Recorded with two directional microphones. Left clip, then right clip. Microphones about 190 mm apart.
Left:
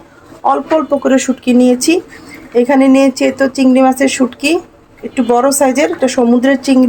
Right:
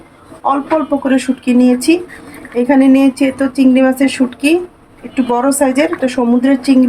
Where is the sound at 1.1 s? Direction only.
30° left (ahead or behind).